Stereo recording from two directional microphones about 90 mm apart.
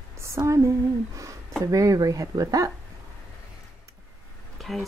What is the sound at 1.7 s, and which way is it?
Speech, 40° right (ahead or behind).